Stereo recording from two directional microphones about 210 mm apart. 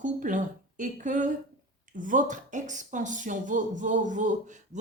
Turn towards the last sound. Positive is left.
turn(degrees=-35)  # may be behind; listen again after turning